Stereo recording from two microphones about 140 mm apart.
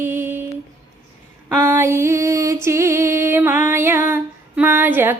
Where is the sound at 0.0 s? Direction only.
15° right (ahead or behind).